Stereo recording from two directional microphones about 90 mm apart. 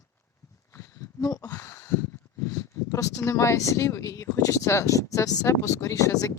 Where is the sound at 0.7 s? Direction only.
30° left (ahead or behind).